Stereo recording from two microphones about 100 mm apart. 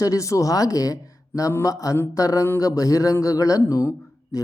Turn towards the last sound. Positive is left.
turn(degrees=35)  # may be behind; listen again after turning